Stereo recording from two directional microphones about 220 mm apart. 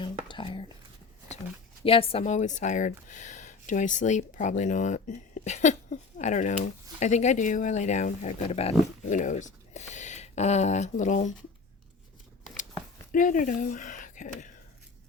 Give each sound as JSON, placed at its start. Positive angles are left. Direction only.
{"t": 0.3, "sound": "whispering", "side_deg": 20}
{"t": 1.8, "sound": "speech", "side_deg": 25}
{"t": 13.1, "sound": "speech", "side_deg": 35}